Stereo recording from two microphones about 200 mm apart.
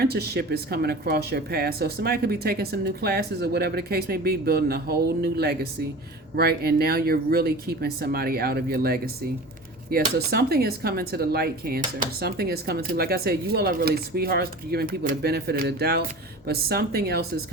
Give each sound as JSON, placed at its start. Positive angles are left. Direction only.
{"t": 0.0, "sound": "speech", "side_deg": -50}